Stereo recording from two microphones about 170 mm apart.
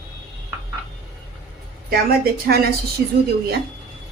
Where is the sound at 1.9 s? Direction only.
65° right (ahead or behind).